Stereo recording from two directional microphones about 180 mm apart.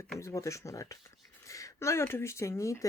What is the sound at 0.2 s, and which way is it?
Speech, 15° left (ahead or behind).